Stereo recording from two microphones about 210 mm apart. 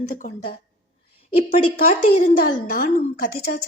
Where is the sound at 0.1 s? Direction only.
40° left (ahead or behind).